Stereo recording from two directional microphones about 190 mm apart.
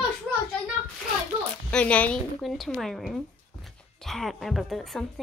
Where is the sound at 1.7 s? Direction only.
5° left (ahead or behind).